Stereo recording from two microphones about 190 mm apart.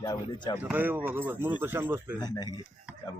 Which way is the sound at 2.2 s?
20° left (ahead or behind).